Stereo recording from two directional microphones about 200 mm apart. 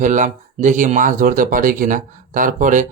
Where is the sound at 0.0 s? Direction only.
40° right (ahead or behind).